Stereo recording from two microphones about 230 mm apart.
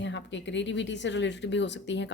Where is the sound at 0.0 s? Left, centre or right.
Left.